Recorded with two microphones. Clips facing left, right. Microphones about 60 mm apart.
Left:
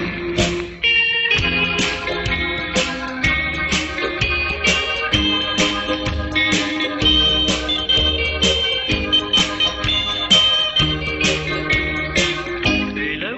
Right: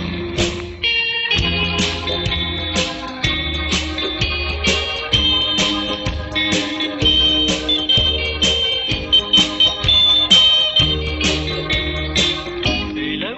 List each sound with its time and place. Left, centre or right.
4.6 s music: centre
7.9 s music: centre
9.8 s music: left
10.3 s music: centre